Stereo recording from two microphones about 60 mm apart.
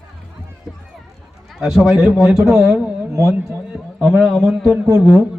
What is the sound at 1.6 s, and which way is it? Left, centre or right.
Speech, centre.